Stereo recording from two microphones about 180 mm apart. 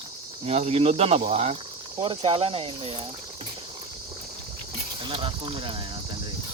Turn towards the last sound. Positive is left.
turn(degrees=-30)  # may be behind; listen again after turning